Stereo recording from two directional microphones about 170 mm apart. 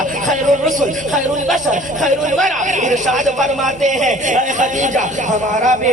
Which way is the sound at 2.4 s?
45° right (ahead or behind).